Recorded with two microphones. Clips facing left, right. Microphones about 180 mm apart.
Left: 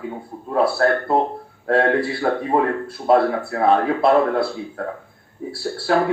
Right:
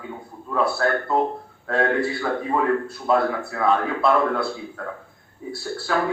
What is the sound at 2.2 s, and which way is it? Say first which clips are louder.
Speech: left 4 dB; 30° left (ahead or behind).